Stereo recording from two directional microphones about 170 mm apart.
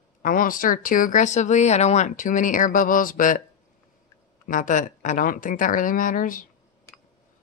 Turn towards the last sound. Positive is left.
turn(degrees=55)  # may be behind; listen again after turning